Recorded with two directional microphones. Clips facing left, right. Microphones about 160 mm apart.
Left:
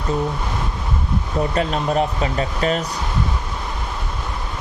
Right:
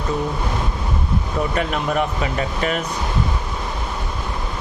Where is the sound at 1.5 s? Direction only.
30° left (ahead or behind).